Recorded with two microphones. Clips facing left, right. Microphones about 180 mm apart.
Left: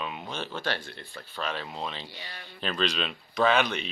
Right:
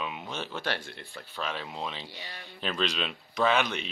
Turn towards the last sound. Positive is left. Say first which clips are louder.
# left 2 dB
turn(degrees=0)  # may be behind; listen again after turning